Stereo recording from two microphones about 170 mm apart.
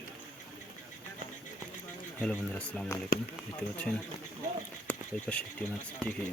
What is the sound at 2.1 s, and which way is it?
Speech, 10° left (ahead or behind).